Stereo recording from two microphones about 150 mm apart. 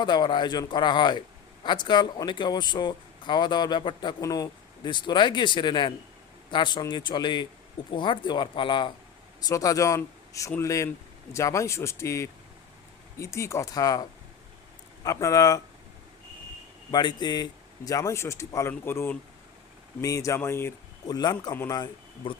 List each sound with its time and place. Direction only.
0.0 s speech: 30° left (ahead or behind)
9.4 s speech: 25° left (ahead or behind)
16.9 s speech: 30° left (ahead or behind)
21.2 s speech: 25° left (ahead or behind)
21.5 s a man's voice: 15° left (ahead or behind)
21.8 s speech: 35° left (ahead or behind)